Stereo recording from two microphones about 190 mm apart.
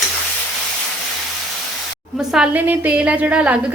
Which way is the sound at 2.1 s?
5° right (ahead or behind).